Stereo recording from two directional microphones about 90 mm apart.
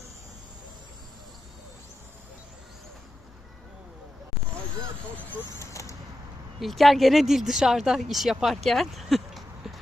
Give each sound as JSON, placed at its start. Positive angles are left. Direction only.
{"t": 5.5, "sound": "vehicle", "side_deg": 35}
{"t": 6.6, "sound": "speech", "side_deg": 0}